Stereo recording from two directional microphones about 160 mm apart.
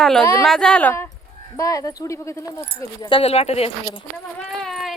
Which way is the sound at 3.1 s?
35° left (ahead or behind).